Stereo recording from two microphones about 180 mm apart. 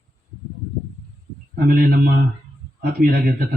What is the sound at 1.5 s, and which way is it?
Speech, 55° right (ahead or behind).